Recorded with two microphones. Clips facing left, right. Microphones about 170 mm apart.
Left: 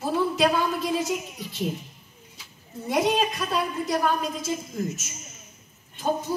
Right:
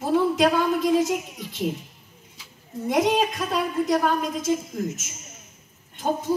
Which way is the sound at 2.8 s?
20° right (ahead or behind).